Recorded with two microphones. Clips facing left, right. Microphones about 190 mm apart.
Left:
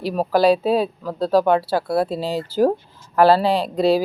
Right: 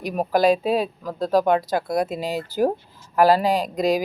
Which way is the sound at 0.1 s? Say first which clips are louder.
Left 2 dB; 35° left (ahead or behind).